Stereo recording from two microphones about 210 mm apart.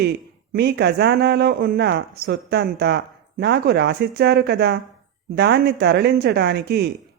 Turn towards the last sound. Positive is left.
turn(degrees=-50)  # may be behind; listen again after turning